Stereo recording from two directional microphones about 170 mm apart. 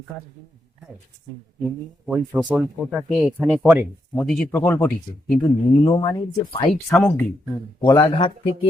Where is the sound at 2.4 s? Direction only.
5° right (ahead or behind).